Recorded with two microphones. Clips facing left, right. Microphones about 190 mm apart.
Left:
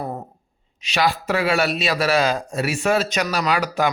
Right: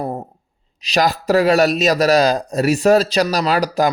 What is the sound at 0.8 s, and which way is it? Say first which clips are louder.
A man's voice: right 4 dB; 40° right (ahead or behind).